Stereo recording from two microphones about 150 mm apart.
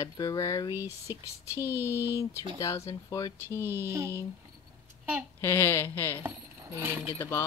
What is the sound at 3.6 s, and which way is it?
Speech, 15° right (ahead or behind).